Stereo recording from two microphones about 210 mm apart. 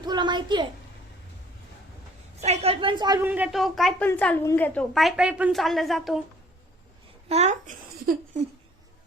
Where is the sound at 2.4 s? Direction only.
30° right (ahead or behind); by 6.2 s centre (ahead or behind).